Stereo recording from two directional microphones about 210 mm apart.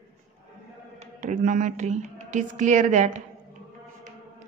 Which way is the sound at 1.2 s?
35° right (ahead or behind).